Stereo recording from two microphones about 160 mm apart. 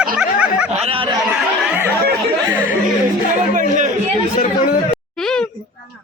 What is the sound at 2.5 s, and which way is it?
Chatter, 10° right (ahead or behind).